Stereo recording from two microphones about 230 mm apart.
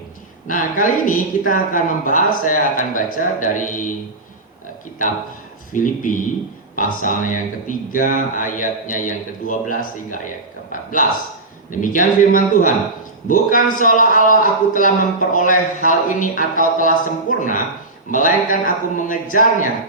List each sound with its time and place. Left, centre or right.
0.4 s a man's voice: left
5.7 s a man's voice: left
11.7 s a man's voice: left